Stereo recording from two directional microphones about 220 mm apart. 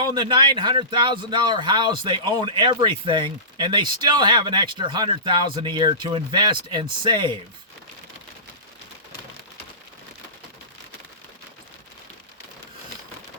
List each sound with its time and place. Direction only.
0.0 s speech: 20° right (ahead or behind)